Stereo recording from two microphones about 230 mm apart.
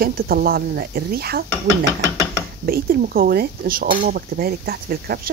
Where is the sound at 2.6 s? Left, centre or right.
Right.